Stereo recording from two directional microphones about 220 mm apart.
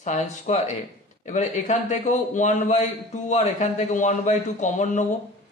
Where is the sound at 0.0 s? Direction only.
30° left (ahead or behind).